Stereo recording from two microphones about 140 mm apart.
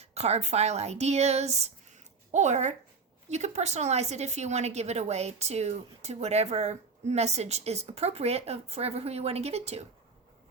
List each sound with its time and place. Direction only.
0.0 s a woman's voice: 50° right (ahead or behind)